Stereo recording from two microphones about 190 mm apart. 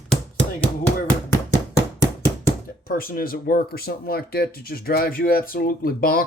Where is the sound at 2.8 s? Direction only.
50° left (ahead or behind).